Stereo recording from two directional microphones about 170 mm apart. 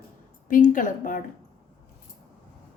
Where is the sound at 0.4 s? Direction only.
50° left (ahead or behind).